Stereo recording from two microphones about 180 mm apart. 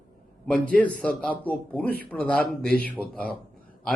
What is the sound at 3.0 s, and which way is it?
Speech, 10° right (ahead or behind).